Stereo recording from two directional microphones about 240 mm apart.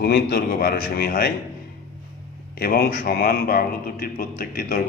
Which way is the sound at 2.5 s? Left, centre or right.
Left.